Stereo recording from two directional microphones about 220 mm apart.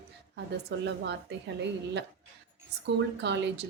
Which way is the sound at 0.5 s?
50° right (ahead or behind).